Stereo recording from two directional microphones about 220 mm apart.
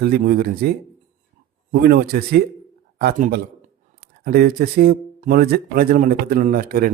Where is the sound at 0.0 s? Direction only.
45° right (ahead or behind).